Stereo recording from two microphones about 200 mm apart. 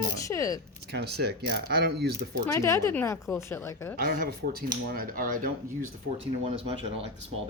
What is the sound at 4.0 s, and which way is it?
Speech, 50° right (ahead or behind).